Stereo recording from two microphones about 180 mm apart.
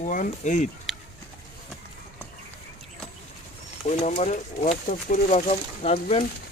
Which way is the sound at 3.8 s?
45° left (ahead or behind).